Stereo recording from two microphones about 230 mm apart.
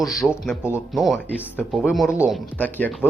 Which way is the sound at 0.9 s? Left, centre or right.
Centre.